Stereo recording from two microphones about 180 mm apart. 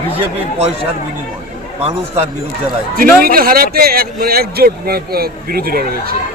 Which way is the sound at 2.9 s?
55° right (ahead or behind).